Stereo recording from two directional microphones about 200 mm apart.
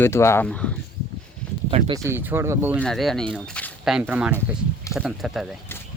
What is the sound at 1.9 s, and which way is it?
Speech, 15° right (ahead or behind).